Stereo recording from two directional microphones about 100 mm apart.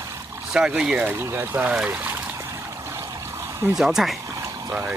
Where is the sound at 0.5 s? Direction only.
5° right (ahead or behind).